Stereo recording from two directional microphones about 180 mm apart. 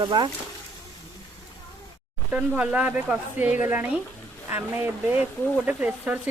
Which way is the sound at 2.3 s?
5° right (ahead or behind).